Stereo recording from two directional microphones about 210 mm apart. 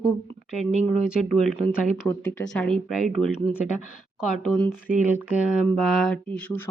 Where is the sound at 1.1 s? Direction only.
Centre (ahead or behind).